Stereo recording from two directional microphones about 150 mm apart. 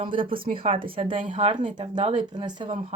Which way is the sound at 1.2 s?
50° right (ahead or behind).